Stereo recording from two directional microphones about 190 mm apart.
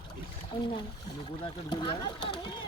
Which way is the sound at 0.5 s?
25° left (ahead or behind).